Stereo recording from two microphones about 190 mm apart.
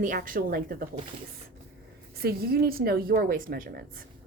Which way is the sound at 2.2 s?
55° right (ahead or behind).